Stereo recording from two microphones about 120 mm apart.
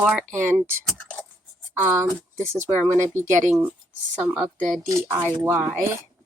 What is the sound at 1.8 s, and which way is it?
Speech, 20° right (ahead or behind).